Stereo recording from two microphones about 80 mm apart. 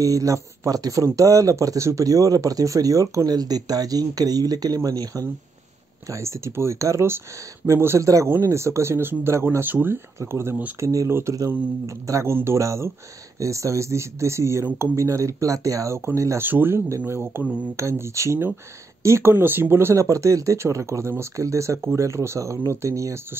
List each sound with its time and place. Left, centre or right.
0.0 s speech: right
6.0 s speech: right
10.8 s speech: right
11.1 s speech: right
11.3 s speech: right
16.3 s speech: right